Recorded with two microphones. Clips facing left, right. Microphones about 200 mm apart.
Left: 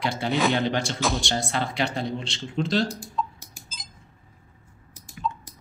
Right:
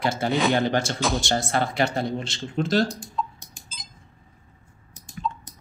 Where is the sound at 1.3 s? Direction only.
50° right (ahead or behind).